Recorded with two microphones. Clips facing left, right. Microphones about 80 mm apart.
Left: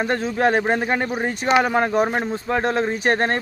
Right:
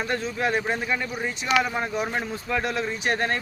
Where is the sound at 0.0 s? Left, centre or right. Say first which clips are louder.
Left 6 dB; left.